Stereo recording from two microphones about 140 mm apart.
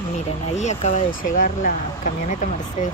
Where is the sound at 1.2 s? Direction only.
70° left (ahead or behind).